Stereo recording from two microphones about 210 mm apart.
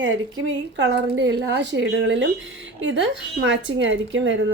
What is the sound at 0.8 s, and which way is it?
A woman's voice, 55° right (ahead or behind).